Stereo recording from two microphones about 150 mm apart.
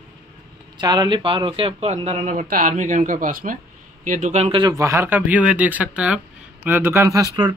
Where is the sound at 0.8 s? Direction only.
30° right (ahead or behind); by 4.6 s 50° right (ahead or behind).